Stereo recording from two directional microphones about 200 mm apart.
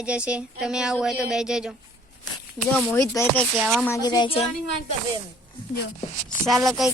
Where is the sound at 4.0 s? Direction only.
20° left (ahead or behind).